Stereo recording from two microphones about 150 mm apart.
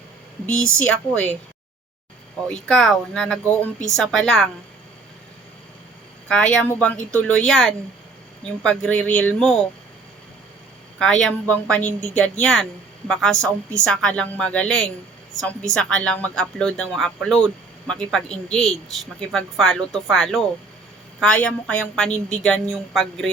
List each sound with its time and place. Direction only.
0.4 s a woman's voice: 5° left (ahead or behind)
2.5 s a woman's voice: 5° left (ahead or behind)
6.2 s a woman's voice: 5° left (ahead or behind)
11.0 s a woman's voice: 5° left (ahead or behind)